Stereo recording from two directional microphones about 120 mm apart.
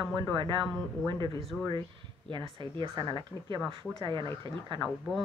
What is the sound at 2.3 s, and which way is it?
A woman's voice, 40° right (ahead or behind).